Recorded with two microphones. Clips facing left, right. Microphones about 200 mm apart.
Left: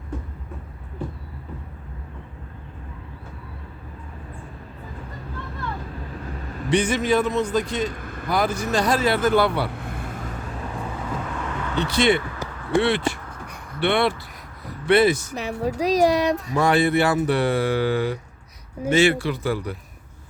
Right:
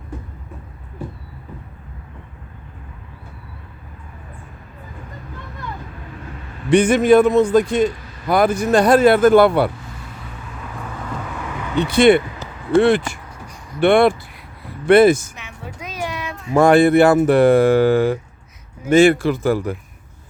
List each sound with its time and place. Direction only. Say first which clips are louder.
6.7 s speech: right 8 dB; 50° right (ahead or behind)
7.9 s vehicle: left 4 dB; 55° left (ahead or behind)
8.3 s speech: right 7 dB; 55° right (ahead or behind)
9.7 s vehicle: left 4 dB; 55° left (ahead or behind)
11.3 s a sound: right 6 dB; 10° right (ahead or behind)
11.9 s speech: right 8 dB; 55° right (ahead or behind)
12.4 s basketball bounce: left 1 dB; 15° left (ahead or behind)
13.7 s speech: right 8 dB; 50° right (ahead or behind)
15.4 s speech: left 11 dB; 35° left (ahead or behind)
16.6 s speech: right 9 dB; 50° right (ahead or behind)